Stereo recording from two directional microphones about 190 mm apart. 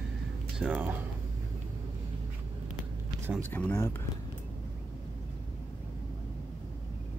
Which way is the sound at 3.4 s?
10° left (ahead or behind).